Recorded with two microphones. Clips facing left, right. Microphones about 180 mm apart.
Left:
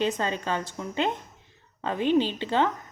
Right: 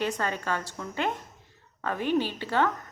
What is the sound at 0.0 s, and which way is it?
Speech, 20° left (ahead or behind).